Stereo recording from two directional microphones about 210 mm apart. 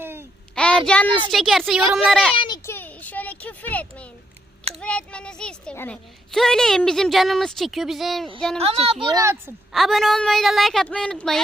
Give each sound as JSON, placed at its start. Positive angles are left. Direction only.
{"t": 0.0, "sound": "a sound", "side_deg": -10}
{"t": 0.5, "sound": "a child's voice", "side_deg": 5}
{"t": 2.3, "sound": "a child's voice", "side_deg": 25}
{"t": 2.6, "sound": "a sound", "side_deg": 10}
{"t": 4.7, "sound": "speech", "side_deg": 5}
{"t": 8.5, "sound": "speech", "side_deg": -25}
{"t": 9.0, "sound": "speech", "side_deg": -15}
{"t": 9.7, "sound": "speech", "side_deg": 0}